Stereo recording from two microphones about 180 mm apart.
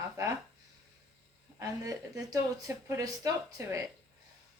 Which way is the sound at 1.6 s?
20° right (ahead or behind).